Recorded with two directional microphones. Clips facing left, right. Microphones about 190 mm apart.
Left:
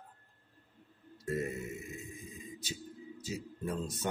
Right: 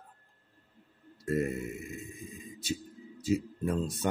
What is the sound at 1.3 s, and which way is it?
Speech, 60° right (ahead or behind).